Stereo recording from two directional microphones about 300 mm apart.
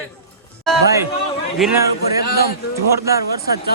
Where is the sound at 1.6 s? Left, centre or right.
Centre.